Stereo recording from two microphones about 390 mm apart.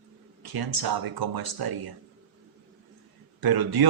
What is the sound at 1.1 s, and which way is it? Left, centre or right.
Speech, right.